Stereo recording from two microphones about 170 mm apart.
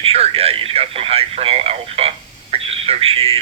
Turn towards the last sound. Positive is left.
turn(degrees=-35)  # may be behind; listen again after turning